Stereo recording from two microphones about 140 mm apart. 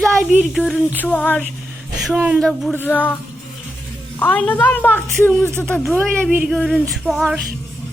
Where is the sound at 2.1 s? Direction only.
5° right (ahead or behind).